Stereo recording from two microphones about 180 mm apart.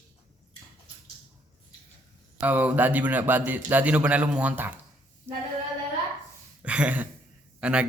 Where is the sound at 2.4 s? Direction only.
10° right (ahead or behind).